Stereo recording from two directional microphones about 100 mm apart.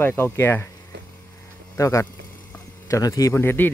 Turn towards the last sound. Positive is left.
turn(degrees=20)  # may be behind; listen again after turning